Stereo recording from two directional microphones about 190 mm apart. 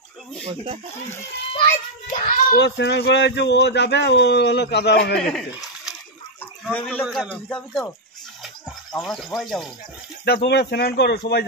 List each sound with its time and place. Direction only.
1.5 s a child's voice: 40° left (ahead or behind)
2.5 s speech: 65° left (ahead or behind)
5.2 s a man's voice: centre (ahead or behind)
8.9 s speech: centre (ahead or behind)
10.2 s speech: 60° left (ahead or behind)